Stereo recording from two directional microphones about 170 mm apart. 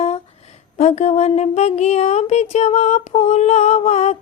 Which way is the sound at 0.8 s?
40° left (ahead or behind).